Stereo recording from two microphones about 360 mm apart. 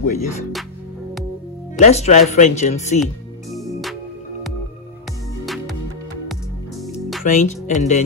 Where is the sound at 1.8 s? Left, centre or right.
Centre.